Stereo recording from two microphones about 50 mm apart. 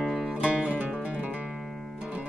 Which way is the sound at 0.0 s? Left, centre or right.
Centre.